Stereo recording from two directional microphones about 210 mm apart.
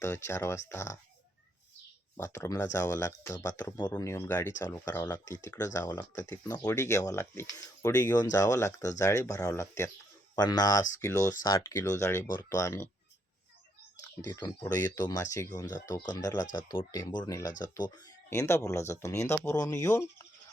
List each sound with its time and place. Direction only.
0.0 s speech: 10° left (ahead or behind)
2.1 s speech: 15° left (ahead or behind)
14.2 s speech: 15° left (ahead or behind)